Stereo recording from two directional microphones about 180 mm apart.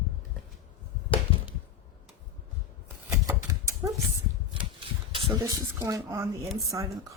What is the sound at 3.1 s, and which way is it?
Typewriter, 15° right (ahead or behind).